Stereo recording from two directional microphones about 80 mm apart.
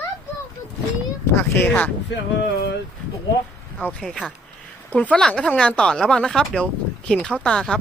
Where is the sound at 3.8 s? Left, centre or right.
Centre.